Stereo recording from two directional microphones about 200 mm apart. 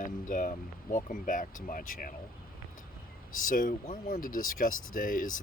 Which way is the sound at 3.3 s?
40° left (ahead or behind).